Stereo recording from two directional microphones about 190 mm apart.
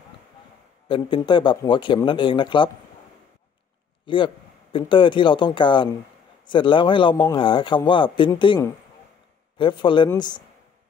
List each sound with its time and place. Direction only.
0.8 s a man's voice: 25° left (ahead or behind)
4.0 s a man's voice: 25° left (ahead or behind)